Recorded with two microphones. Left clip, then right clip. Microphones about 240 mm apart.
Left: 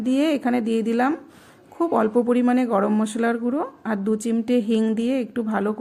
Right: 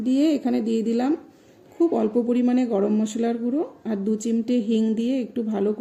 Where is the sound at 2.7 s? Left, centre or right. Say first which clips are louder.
Left 2 dB; left.